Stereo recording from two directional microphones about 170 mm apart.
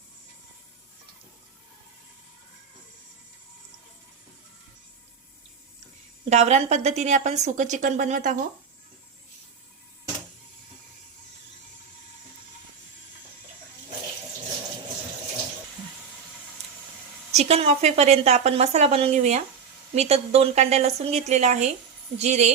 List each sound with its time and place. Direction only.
6.3 s a woman's voice: 40° right (ahead or behind)
17.3 s a woman's voice: 40° right (ahead or behind)